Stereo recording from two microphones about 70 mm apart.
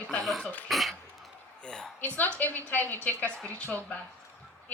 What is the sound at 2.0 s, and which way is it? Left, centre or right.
A woman's voice, left.